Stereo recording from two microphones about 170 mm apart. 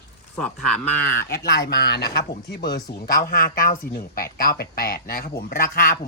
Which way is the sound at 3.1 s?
55° left (ahead or behind).